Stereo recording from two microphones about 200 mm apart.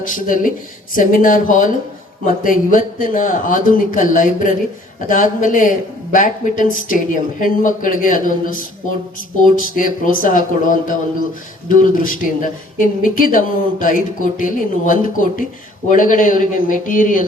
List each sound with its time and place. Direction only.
0.0 s speech: 40° left (ahead or behind)